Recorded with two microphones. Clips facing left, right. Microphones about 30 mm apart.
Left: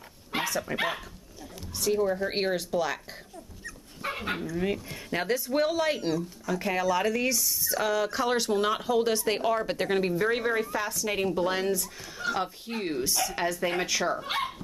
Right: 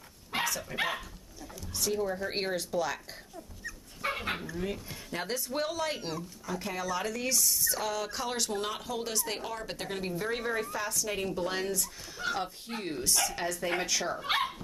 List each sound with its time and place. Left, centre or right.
0.3 s dog: centre
0.7 s speech: centre
1.9 s speech: centre
3.6 s dog: centre
5.2 s speech: centre
5.9 s speech: centre
6.4 s speech: centre
7.8 s speech: centre